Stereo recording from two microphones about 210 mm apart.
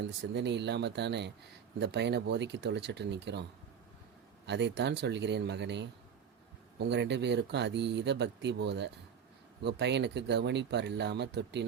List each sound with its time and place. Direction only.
0.0 s speech: 55° right (ahead or behind)
4.4 s speech: 55° right (ahead or behind)